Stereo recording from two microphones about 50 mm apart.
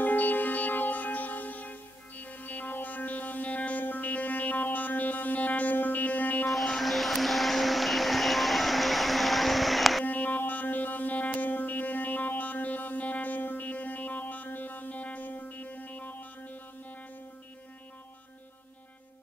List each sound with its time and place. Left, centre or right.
0.0 s music: left
6.4 s vehicle: centre
10.0 s music: left